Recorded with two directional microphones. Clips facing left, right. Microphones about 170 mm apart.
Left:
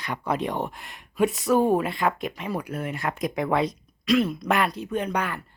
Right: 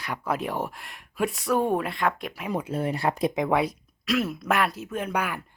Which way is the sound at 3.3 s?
15° right (ahead or behind).